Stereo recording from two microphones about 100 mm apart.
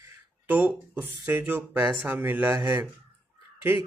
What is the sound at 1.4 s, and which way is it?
Speech, 20° right (ahead or behind).